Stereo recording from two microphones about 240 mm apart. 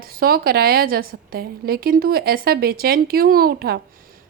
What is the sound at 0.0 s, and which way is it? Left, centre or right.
Speech, right.